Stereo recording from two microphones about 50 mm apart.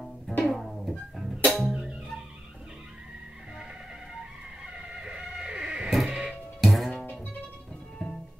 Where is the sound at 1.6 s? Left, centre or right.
Right.